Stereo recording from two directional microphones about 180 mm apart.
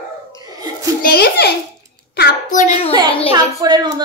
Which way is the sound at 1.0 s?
60° left (ahead or behind).